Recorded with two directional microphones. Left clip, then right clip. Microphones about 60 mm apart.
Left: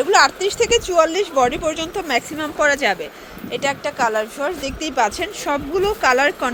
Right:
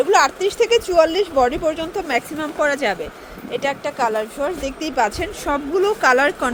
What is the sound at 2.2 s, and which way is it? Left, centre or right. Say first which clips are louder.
Speech: left 2 dB; centre.